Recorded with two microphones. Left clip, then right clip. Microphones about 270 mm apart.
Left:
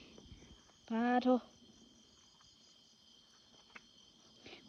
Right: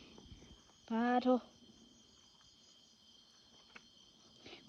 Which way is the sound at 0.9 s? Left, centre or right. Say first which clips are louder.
Even; centre.